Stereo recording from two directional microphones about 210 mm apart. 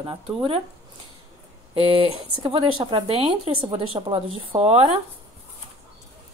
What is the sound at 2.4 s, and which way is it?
Speech, 25° right (ahead or behind).